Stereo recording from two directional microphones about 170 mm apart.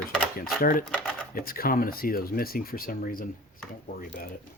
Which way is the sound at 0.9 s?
5° left (ahead or behind).